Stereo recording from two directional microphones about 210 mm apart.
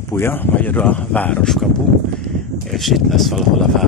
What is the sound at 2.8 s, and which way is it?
Speech, centre (ahead or behind).